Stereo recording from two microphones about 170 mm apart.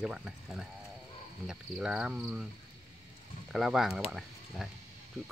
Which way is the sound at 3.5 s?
Centre (ahead or behind).